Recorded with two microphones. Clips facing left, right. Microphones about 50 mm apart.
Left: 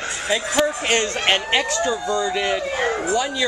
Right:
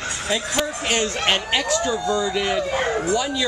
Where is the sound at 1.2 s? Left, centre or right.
Centre.